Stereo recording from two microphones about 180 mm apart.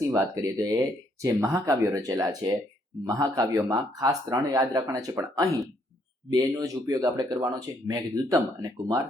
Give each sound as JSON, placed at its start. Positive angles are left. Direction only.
{"t": 0.1, "sound": "speech", "side_deg": -20}